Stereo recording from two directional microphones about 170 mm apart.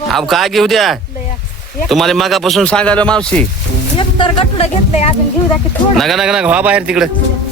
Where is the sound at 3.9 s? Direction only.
30° left (ahead or behind).